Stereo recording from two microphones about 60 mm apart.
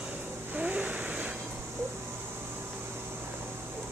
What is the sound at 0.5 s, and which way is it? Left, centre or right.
Vehicle, right.